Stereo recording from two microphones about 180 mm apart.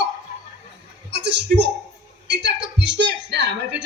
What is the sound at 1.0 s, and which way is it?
A woman's voice, 70° right (ahead or behind).